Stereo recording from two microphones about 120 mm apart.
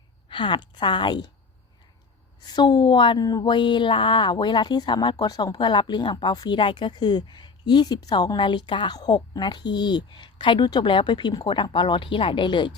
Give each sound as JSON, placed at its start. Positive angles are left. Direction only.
{"t": 0.3, "sound": "a woman's voice", "side_deg": 45}
{"t": 2.6, "sound": "speech", "side_deg": 40}